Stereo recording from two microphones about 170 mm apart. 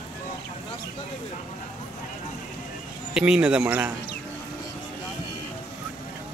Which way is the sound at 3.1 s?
5° right (ahead or behind).